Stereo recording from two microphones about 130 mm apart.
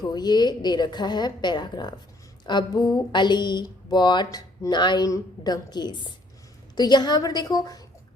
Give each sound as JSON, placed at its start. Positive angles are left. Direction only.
{"t": 0.0, "sound": "speech", "side_deg": 30}